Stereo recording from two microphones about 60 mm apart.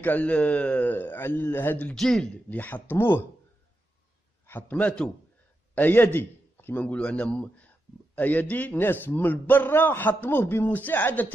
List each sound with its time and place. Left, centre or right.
0.0 s speech: left
0.8 s speech: left
2.0 s a man's voice: centre
2.5 s speech: left
4.5 s a man's voice: left
6.8 s speech: left